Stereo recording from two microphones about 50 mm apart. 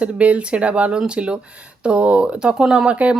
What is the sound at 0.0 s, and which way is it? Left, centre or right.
Speech, right.